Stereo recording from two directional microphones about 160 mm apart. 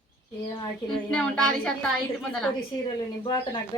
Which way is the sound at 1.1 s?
5° left (ahead or behind).